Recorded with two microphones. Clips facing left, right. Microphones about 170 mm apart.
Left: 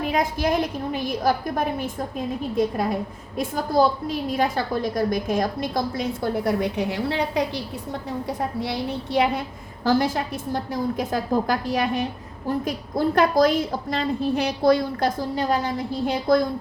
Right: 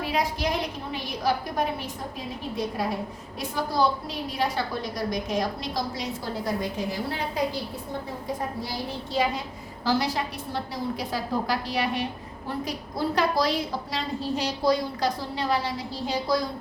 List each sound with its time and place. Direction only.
0.1 s a woman's voice: 50° left (ahead or behind)
3.3 s a woman's voice: 50° left (ahead or behind); by 7.6 s 75° left (ahead or behind)
8.6 s a woman's voice: 65° left (ahead or behind)
9.8 s a woman's voice: 50° left (ahead or behind)